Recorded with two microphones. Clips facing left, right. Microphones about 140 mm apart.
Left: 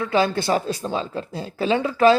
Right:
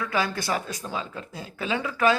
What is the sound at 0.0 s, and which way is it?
Speech, 25° left (ahead or behind).